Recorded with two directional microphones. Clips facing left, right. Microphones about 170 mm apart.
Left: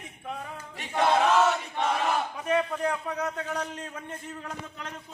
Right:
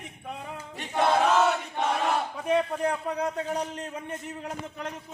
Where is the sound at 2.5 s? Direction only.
25° right (ahead or behind).